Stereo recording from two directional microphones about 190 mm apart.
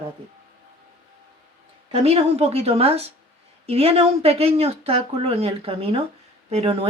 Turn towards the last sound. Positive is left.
turn(degrees=-30)  # may be behind; listen again after turning